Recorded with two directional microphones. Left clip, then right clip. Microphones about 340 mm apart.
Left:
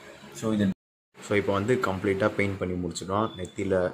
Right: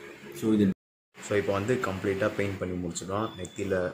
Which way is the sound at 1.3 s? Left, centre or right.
Centre.